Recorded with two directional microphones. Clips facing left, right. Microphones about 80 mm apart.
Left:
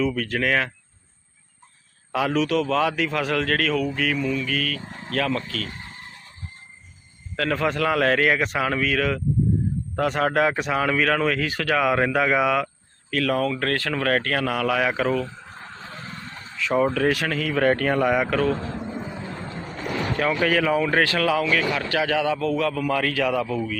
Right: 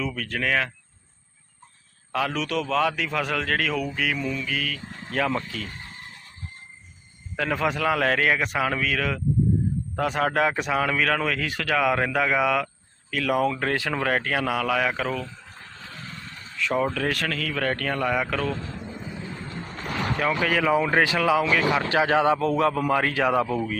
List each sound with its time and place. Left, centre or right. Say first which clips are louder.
0.0 s speech: left 5 dB; centre
2.1 s speech: left 4 dB; centre
7.3 s speech: left 2 dB; centre
16.6 s speech: left 4 dB; centre
17.3 s a man's voice: left 6 dB; centre
19.3 s vehicle: left 3 dB; left
19.8 s speech: left 2 dB; centre
20.7 s a man's voice: even; centre; by 23.7 s right